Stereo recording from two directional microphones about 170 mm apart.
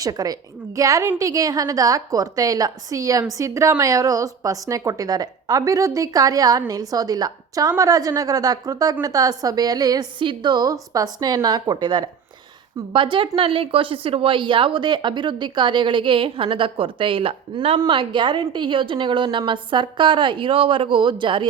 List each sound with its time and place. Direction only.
0.0 s a woman's voice: 20° right (ahead or behind)